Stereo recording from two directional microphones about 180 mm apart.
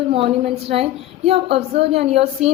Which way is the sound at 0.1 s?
30° right (ahead or behind).